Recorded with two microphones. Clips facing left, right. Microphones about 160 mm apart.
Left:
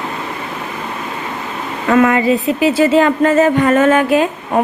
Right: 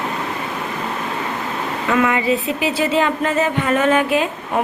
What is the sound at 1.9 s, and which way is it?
Speech, 45° left (ahead or behind).